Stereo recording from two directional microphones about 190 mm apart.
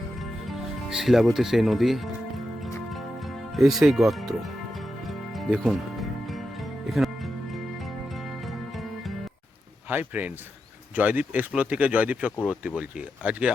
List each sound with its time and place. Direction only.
0.2 s music: centre (ahead or behind)
9.9 s speech: 10° right (ahead or behind)